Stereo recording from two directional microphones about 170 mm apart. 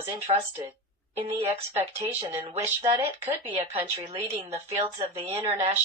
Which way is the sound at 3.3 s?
30° right (ahead or behind).